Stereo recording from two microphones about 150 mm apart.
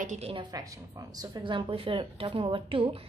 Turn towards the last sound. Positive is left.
turn(degrees=-40)  # may be behind; listen again after turning